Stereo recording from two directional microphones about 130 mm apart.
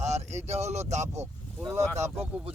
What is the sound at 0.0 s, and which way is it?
Speech, 60° right (ahead or behind).